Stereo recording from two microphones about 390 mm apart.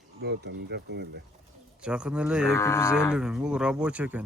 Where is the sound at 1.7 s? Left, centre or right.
Centre.